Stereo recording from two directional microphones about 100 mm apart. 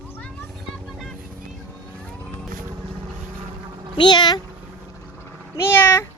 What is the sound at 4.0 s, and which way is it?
Speech, 50° left (ahead or behind).